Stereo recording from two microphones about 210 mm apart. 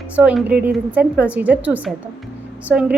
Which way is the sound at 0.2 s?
5° right (ahead or behind).